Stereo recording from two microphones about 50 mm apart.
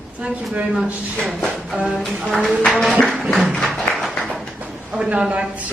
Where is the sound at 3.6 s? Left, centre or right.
Centre.